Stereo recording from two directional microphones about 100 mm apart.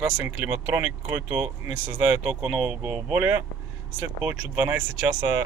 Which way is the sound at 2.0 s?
15° right (ahead or behind).